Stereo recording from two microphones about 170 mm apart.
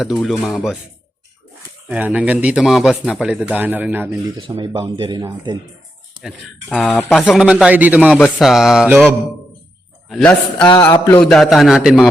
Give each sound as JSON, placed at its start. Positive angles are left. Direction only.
{"t": 0.0, "sound": "speech", "side_deg": 0}
{"t": 1.9, "sound": "speech", "side_deg": -10}
{"t": 4.4, "sound": "speech", "side_deg": -30}
{"t": 6.2, "sound": "speech", "side_deg": 0}
{"t": 10.8, "sound": "speech", "side_deg": 15}